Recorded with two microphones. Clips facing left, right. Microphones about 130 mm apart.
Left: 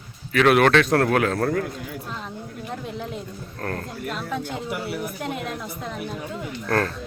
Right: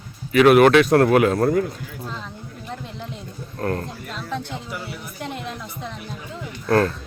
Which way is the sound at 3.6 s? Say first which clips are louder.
Right 5 dB; 10° right (ahead or behind).